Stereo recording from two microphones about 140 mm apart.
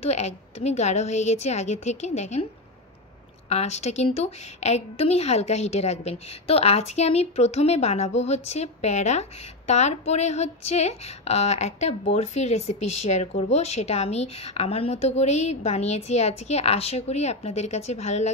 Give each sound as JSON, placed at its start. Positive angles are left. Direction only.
{"t": 0.0, "sound": "speech", "side_deg": 50}
{"t": 3.4, "sound": "speech", "side_deg": 50}